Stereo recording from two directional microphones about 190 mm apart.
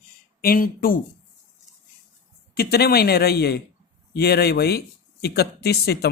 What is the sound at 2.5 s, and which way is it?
Speech, 55° left (ahead or behind).